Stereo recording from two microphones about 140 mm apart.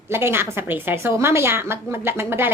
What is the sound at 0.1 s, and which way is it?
A woman's voice, 15° right (ahead or behind).